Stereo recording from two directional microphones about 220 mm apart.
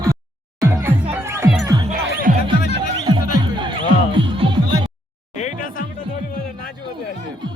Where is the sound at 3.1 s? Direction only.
20° right (ahead or behind).